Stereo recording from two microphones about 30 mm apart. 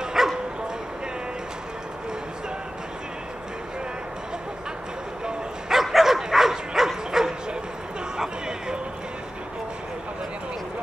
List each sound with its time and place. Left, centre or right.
0.2 s bow-wow: centre
5.7 s dog: centre
8.2 s a sound: right